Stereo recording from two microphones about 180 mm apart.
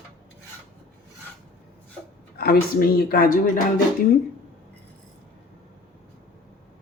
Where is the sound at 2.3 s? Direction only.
55° left (ahead or behind).